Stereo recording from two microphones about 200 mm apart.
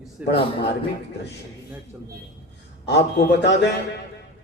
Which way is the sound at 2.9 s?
60° left (ahead or behind).